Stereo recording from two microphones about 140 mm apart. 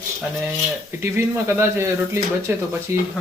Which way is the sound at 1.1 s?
15° right (ahead or behind).